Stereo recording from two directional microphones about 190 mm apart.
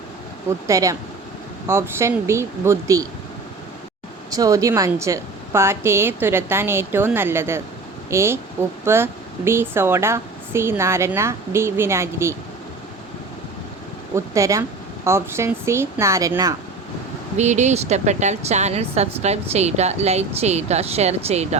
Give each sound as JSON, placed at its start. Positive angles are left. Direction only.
{"t": 0.7, "sound": "speech", "side_deg": -15}
{"t": 4.3, "sound": "speech", "side_deg": -20}
{"t": 14.2, "sound": "speech", "side_deg": -15}
{"t": 17.3, "sound": "speech", "side_deg": -40}